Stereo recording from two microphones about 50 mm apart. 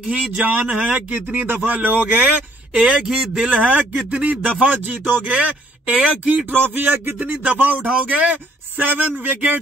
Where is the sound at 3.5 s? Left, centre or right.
Right.